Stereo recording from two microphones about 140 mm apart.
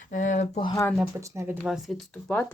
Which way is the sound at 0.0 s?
65° left (ahead or behind).